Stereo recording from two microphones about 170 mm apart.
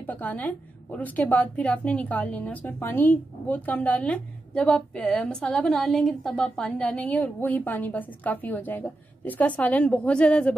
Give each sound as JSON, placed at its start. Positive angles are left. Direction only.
{"t": 0.0, "sound": "a woman's voice", "side_deg": 10}